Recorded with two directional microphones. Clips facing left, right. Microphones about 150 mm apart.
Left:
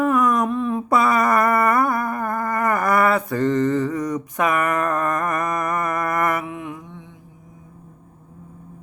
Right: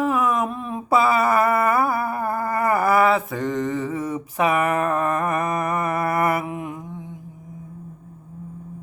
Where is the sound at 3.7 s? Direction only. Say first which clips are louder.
Left 3 dB; 5° right (ahead or behind).